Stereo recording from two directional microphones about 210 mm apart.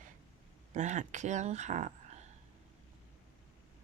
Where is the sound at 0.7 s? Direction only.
35° right (ahead or behind).